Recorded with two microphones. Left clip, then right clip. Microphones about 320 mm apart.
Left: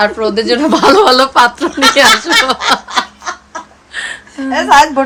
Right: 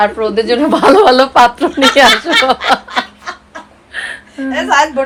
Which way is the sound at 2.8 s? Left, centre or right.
Centre.